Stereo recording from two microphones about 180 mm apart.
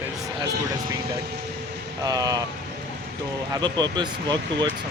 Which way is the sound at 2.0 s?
20° right (ahead or behind).